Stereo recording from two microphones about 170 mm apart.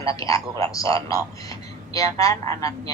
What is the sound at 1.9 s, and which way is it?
Speech, 20° left (ahead or behind).